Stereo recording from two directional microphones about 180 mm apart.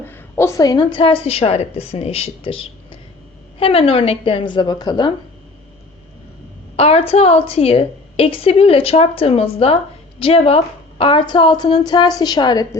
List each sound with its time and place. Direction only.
0.0 s a woman's voice: 10° left (ahead or behind)
6.7 s a woman's voice: 35° left (ahead or behind)